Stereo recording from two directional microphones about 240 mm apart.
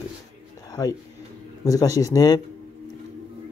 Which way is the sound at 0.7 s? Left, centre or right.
Centre.